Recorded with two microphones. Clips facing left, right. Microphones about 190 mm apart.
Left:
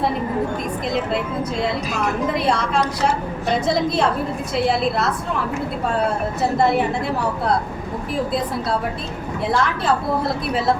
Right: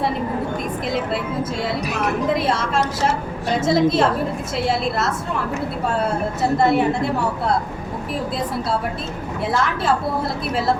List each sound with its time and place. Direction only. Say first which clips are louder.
2.4 s a woman's voice: left 1 dB; centre (ahead or behind)
3.7 s a woman's voice: right 5 dB; centre (ahead or behind)
6.6 s a woman's voice: right 2 dB; centre (ahead or behind)
9.5 s a woman's voice: left 1 dB; centre (ahead or behind)